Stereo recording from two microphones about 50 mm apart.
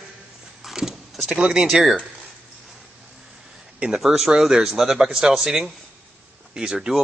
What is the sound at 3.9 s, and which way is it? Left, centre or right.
Speech, centre.